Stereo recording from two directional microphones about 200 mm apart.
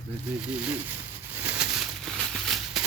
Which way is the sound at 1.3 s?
10° right (ahead or behind).